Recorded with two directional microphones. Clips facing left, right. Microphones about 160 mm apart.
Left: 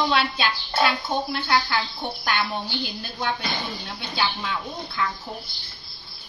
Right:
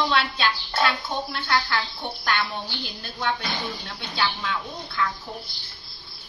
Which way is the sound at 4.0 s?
10° left (ahead or behind).